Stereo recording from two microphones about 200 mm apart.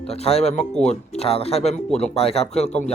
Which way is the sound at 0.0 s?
30° left (ahead or behind).